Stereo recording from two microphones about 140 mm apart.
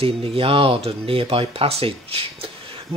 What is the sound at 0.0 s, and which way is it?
Speech, 40° right (ahead or behind).